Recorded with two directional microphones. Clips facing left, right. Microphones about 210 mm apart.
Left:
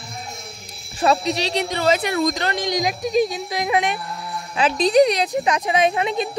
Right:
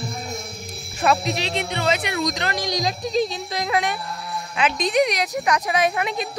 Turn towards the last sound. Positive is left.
turn(degrees=25)  # may be behind; listen again after turning